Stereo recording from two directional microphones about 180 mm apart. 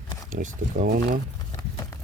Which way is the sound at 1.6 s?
20° left (ahead or behind).